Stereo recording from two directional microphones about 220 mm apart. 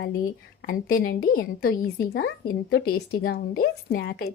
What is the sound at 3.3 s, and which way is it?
A woman's voice, 45° left (ahead or behind).